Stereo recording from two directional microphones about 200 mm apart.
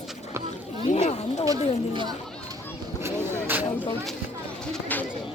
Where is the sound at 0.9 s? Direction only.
35° left (ahead or behind).